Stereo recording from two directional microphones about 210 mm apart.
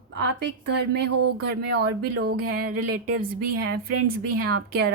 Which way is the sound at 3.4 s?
45° right (ahead or behind).